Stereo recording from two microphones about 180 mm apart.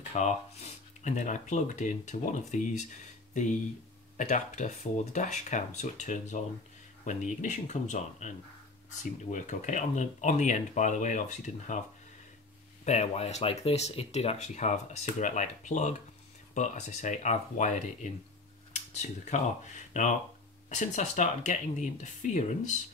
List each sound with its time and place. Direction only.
0.1 s speech: 40° left (ahead or behind)
12.8 s speech: 40° left (ahead or behind)